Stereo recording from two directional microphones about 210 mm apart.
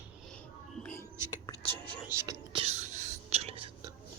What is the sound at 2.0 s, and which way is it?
Whispering, 15° right (ahead or behind).